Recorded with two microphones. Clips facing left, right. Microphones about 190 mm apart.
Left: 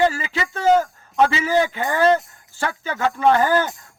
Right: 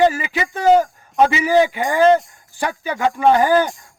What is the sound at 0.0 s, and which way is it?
Speech, 15° right (ahead or behind).